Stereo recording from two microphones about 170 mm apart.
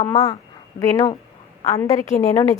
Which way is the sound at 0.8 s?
20° left (ahead or behind).